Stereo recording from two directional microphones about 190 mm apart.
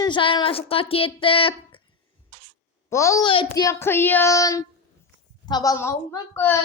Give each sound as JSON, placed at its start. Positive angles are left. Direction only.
{"t": 0.0, "sound": "speech", "side_deg": 25}
{"t": 2.9, "sound": "child singing", "side_deg": 15}